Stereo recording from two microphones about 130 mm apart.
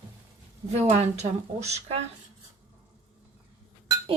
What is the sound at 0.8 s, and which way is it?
A woman's voice, 55° right (ahead or behind).